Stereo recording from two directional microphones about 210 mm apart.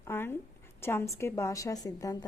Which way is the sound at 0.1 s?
10° left (ahead or behind).